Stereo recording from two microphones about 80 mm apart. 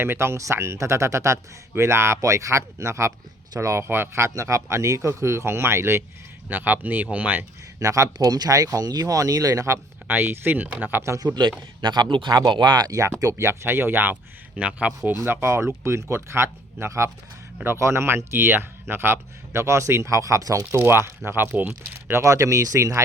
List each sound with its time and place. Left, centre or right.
0.0 s speech: right
6.5 s speech: right
7.8 s speech: right
10.1 s speech: right
11.8 s speech: right
12.5 s speech: right
13.5 s speech: right; by 14.9 s centre
15.2 s speech: right
20.7 s speech: right
22.2 s speech: right